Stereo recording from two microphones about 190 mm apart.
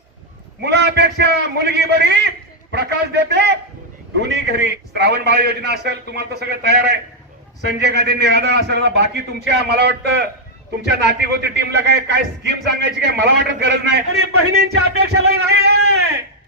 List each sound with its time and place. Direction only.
0.6 s a man's voice: 65° right (ahead or behind)